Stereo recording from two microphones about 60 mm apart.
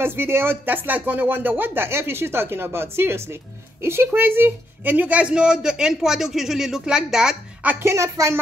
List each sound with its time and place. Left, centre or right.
0.0 s a woman's voice: right; by 7.3 s centre
7.8 s speech: right